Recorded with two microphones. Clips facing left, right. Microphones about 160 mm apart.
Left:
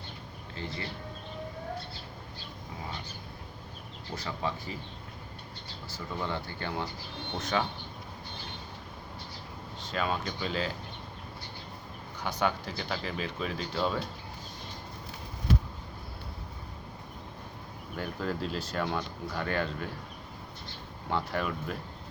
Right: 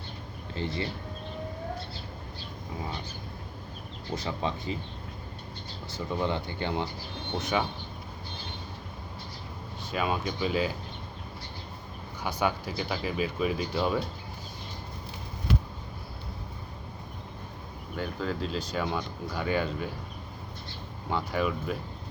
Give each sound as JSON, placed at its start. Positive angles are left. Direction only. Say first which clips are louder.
{"t": 0.5, "sound": "speech", "louder": "right 6 dB", "side_deg": -30}
{"t": 4.1, "sound": "speech", "louder": "right 3 dB", "side_deg": -20}
{"t": 5.9, "sound": "speech", "louder": "right 5 dB", "side_deg": -20}
{"t": 9.9, "sound": "speech", "louder": "right 2 dB", "side_deg": -10}
{"t": 12.2, "sound": "speech", "louder": "right 1 dB", "side_deg": -10}
{"t": 17.9, "sound": "speech", "louder": "right 2 dB", "side_deg": 0}
{"t": 21.1, "sound": "speech", "louder": "right 3 dB", "side_deg": -5}